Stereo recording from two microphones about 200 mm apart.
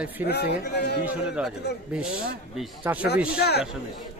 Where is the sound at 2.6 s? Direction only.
5° right (ahead or behind).